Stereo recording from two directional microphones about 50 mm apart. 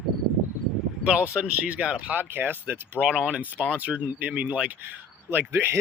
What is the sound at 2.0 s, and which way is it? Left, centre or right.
Speech, right.